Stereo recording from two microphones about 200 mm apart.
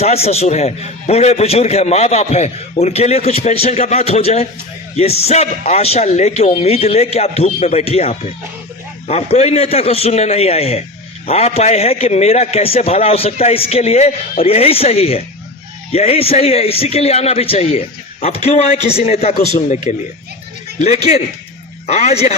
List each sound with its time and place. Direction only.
0.0 s a man's voice: 30° left (ahead or behind)